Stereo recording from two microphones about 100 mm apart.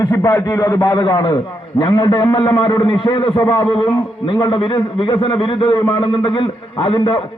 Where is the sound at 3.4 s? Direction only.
45° left (ahead or behind).